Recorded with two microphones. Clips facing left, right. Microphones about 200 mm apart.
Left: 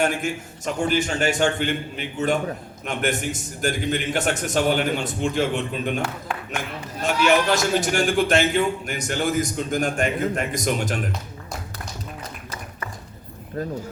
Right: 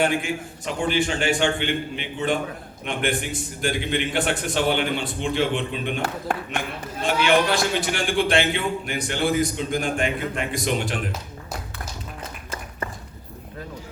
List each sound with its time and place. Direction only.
0.0 s a man's voice: 45° left (ahead or behind)
7.0 s a man's voice: 45° left (ahead or behind)